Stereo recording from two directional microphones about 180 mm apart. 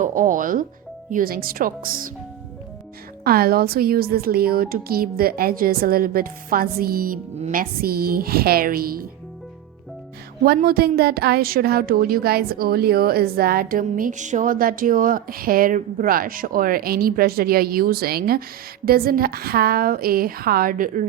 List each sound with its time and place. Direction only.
0.0 s speech: 45° right (ahead or behind)
3.2 s a woman's voice: 55° right (ahead or behind)
10.4 s a woman's voice: 55° right (ahead or behind)